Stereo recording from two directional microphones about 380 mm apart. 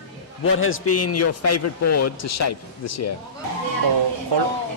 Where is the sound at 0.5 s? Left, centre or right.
Left.